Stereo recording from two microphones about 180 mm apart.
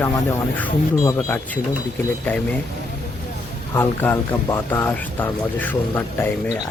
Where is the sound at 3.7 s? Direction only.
10° left (ahead or behind).